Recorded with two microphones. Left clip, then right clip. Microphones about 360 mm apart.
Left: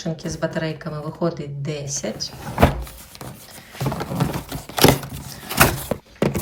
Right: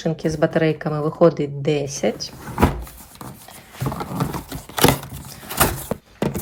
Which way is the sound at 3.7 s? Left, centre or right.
Centre.